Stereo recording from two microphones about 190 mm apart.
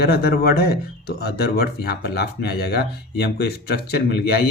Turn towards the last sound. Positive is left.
turn(degrees=55)  # may be behind; listen again after turning